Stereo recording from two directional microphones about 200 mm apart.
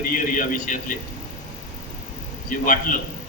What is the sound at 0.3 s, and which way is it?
Speech, 40° left (ahead or behind).